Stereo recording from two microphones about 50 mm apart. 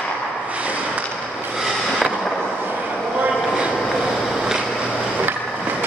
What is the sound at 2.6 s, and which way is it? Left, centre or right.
Vehicle, right.